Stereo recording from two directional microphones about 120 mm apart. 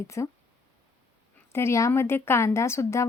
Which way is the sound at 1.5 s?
25° left (ahead or behind).